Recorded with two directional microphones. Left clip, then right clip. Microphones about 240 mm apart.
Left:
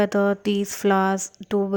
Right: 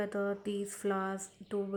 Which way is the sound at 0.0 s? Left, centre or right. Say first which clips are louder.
Left 14 dB; left.